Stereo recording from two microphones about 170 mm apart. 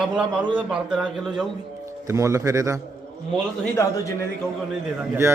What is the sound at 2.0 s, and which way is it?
Speech, 20° right (ahead or behind).